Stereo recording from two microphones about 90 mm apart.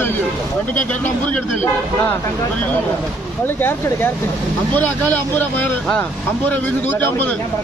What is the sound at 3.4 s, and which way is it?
Speech, 25° left (ahead or behind).